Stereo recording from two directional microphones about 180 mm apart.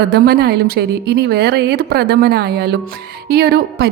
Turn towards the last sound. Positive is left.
turn(degrees=-60)  # may be behind; listen again after turning